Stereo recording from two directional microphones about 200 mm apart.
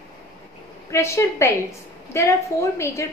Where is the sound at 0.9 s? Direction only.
15° left (ahead or behind).